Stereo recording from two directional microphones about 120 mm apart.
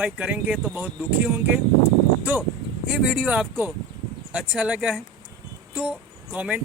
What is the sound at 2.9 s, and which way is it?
Speech, 10° right (ahead or behind).